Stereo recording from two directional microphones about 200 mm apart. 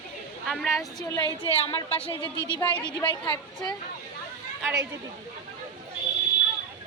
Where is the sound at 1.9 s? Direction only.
10° left (ahead or behind).